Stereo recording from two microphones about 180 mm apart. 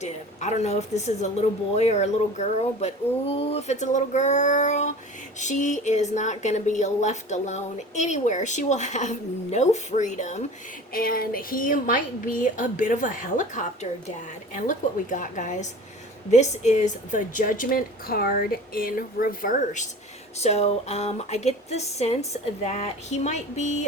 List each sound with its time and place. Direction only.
0.0 s a woman's voice: 40° left (ahead or behind)
10.9 s a woman's voice: 55° left (ahead or behind)